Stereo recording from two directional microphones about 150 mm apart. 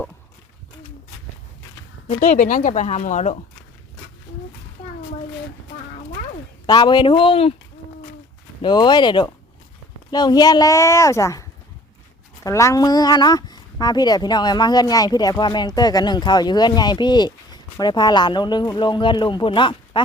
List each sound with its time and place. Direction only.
2.3 s a woman's voice: 60° left (ahead or behind)
6.7 s speech: 30° left (ahead or behind)
8.6 s speech: 30° left (ahead or behind)